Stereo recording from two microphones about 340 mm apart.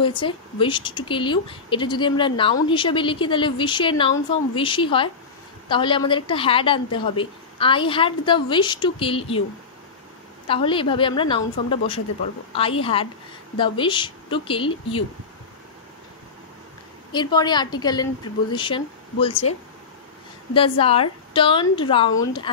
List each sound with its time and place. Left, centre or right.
0.0 s speech: centre
10.5 s speech: centre
17.1 s speech: centre
20.5 s speech: centre